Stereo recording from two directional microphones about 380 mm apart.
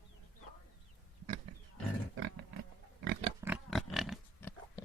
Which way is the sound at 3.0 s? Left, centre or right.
Centre.